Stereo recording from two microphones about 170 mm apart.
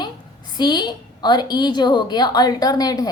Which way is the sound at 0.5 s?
25° left (ahead or behind).